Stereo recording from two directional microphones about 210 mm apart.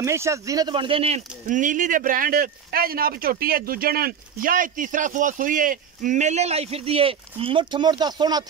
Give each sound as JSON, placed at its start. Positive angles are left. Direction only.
{"t": 0.0, "sound": "speech", "side_deg": -15}